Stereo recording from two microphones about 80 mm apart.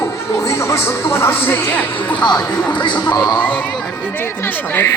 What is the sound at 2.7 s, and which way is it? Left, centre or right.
Speech, left.